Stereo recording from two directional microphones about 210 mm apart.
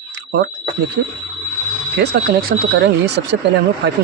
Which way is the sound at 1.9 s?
45° right (ahead or behind).